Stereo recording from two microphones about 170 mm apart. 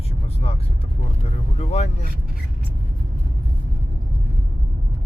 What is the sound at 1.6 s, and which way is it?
Speech, 40° left (ahead or behind).